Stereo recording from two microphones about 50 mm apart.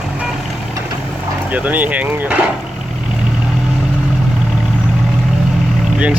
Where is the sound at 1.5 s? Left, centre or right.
Right.